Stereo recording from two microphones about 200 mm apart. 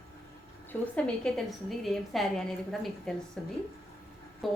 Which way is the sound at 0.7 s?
5° left (ahead or behind).